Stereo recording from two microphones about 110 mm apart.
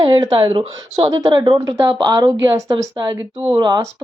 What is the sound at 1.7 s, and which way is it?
Speech, 35° right (ahead or behind).